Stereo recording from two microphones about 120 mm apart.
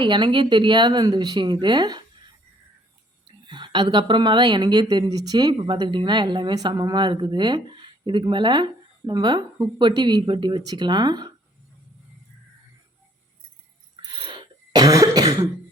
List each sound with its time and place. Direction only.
0.0 s speech: 40° right (ahead or behind)
3.2 s speech: 40° right (ahead or behind)
14.0 s throat clearing: 40° right (ahead or behind)